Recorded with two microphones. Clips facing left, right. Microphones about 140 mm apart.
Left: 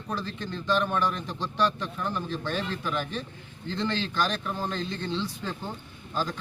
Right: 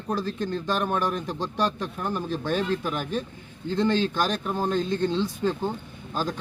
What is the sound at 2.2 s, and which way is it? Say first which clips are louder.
Speech: right 3 dB; 15° right (ahead or behind).